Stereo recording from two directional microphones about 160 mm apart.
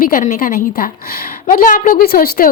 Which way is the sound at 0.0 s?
60° left (ahead or behind).